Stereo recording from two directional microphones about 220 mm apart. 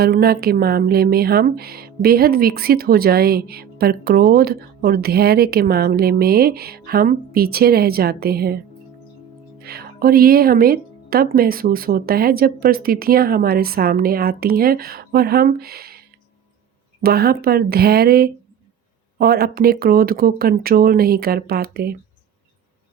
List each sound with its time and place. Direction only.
0.0 s speech: 45° right (ahead or behind)